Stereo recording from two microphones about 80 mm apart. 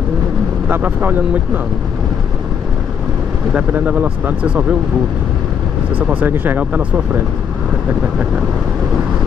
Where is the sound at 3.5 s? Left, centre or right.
Centre.